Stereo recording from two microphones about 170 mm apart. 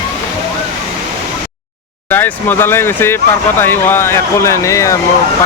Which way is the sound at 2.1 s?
10° left (ahead or behind).